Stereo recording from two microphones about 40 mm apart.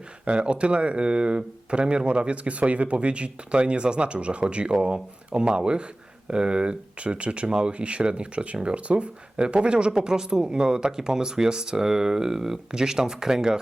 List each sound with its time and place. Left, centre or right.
0.3 s speech: right